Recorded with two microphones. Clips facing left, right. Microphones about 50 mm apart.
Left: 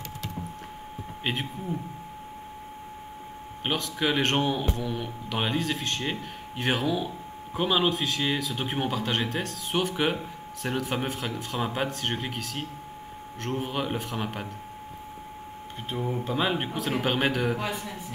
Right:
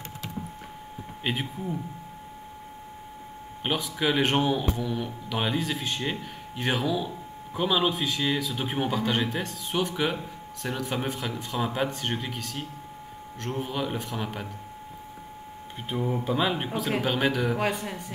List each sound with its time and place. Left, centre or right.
1.2 s speech: centre
3.6 s speech: centre
6.6 s a man's voice: centre
7.9 s speech: centre
9.7 s a man's voice: centre
13.5 s a man's voice: centre
13.9 s speech: centre
15.9 s speech: centre
16.3 s a man's voice: centre
17.6 s speech: right